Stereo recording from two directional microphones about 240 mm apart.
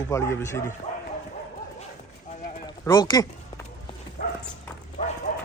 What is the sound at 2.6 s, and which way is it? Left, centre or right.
Speech, centre.